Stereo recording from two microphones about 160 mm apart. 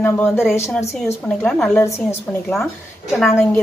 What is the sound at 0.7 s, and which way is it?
Speech, 5° left (ahead or behind).